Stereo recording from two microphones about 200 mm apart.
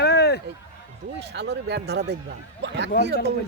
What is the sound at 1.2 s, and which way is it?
Speech, 55° right (ahead or behind).